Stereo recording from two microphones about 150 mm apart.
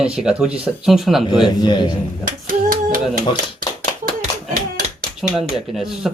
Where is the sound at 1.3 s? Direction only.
30° left (ahead or behind).